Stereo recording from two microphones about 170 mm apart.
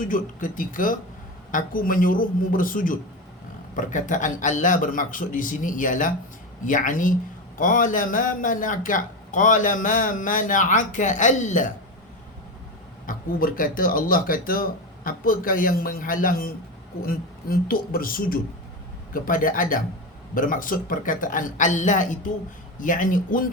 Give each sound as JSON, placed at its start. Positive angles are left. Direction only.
{"t": 0.0, "sound": "a man's voice", "side_deg": 50}
{"t": 13.1, "sound": "a man's voice", "side_deg": 55}